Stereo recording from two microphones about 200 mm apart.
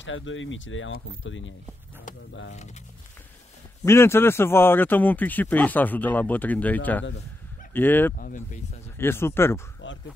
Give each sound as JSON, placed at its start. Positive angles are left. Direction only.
{"t": 0.0, "sound": "speech", "side_deg": 70}
{"t": 3.8, "sound": "speech", "side_deg": 10}
{"t": 8.2, "sound": "speech", "side_deg": 40}
{"t": 8.9, "sound": "speech", "side_deg": 10}
{"t": 9.8, "sound": "a sound", "side_deg": 70}